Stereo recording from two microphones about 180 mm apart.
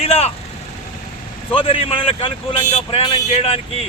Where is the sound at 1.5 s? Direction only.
30° left (ahead or behind).